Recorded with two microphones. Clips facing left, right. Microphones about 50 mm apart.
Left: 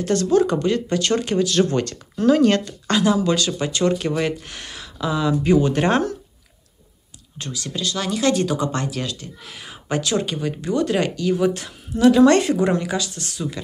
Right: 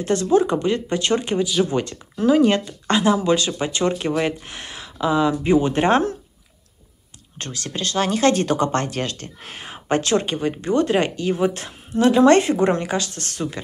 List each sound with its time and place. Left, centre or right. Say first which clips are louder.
0.0 s speech: even; right
1.5 s speech: left 1 dB; centre; by 6.1 s right
7.3 s speech: even; right